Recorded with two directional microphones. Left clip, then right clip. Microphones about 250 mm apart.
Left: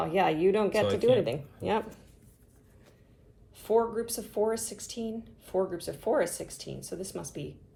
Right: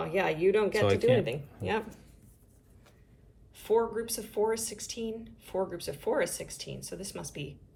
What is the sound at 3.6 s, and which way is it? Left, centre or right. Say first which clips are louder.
A woman's voice: left 1 dB; centre.